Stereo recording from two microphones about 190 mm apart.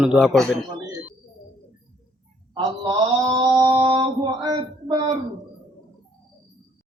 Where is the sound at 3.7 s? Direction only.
25° right (ahead or behind).